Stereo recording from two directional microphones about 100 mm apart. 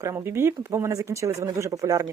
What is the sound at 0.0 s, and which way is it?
Speech, 30° right (ahead or behind).